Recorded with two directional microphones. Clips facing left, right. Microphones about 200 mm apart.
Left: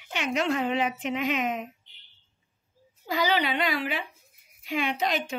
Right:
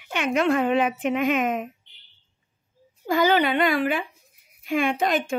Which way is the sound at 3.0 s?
50° right (ahead or behind).